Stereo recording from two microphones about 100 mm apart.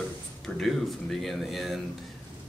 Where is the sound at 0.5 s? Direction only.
Centre (ahead or behind).